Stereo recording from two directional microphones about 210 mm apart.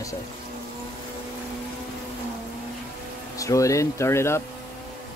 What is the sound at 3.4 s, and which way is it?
Speech, 15° left (ahead or behind).